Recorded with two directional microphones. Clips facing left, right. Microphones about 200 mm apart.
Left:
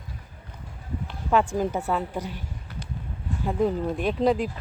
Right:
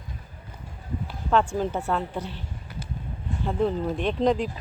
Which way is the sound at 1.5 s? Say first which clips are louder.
Left 1 dB; 10° left (ahead or behind).